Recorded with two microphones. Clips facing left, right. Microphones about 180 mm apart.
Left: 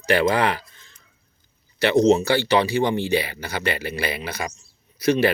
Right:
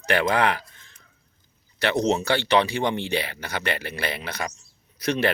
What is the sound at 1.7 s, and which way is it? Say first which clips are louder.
Speech: left 6 dB; 10° left (ahead or behind).